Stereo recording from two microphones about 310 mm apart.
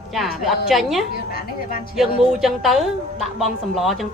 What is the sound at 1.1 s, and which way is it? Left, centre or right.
Speech, left.